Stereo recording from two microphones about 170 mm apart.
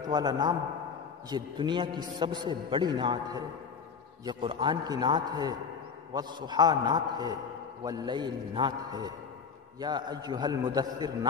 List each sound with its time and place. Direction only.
0.0 s a man's voice: 25° right (ahead or behind)